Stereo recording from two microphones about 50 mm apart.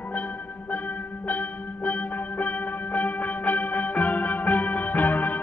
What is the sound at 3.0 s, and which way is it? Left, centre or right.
Music, left.